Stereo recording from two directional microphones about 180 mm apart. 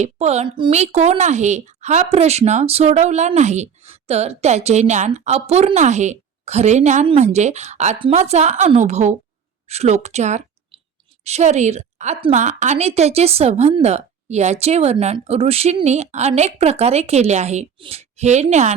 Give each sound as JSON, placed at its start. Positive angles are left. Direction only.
{"t": 0.0, "sound": "speech", "side_deg": -35}